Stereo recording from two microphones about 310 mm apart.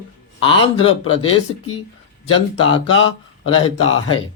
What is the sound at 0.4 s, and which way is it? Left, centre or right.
Speech, centre.